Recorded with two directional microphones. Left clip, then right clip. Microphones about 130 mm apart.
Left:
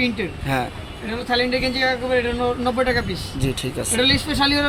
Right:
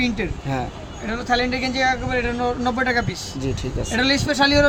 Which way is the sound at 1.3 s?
25° right (ahead or behind).